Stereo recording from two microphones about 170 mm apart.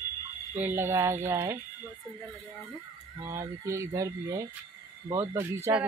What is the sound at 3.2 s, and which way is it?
Speech, 15° right (ahead or behind).